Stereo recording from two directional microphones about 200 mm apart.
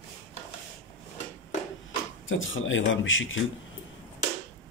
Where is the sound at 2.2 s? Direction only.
70° left (ahead or behind).